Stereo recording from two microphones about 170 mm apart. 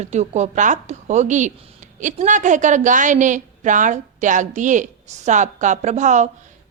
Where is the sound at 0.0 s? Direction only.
40° right (ahead or behind).